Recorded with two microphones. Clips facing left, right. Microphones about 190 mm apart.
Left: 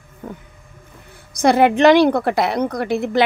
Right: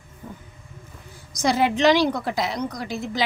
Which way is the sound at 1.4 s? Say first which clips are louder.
Left 7 dB; 60° left (ahead or behind).